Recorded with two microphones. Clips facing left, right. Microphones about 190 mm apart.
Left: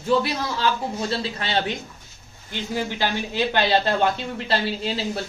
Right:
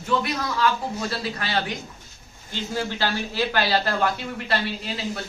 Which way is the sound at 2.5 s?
15° left (ahead or behind).